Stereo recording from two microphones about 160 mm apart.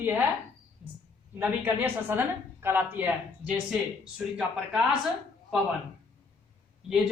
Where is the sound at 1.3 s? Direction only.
15° right (ahead or behind).